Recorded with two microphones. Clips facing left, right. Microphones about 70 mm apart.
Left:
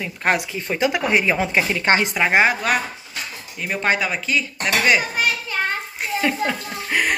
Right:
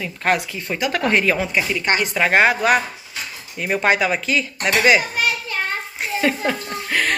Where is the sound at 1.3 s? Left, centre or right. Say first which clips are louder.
Left 1 dB; left.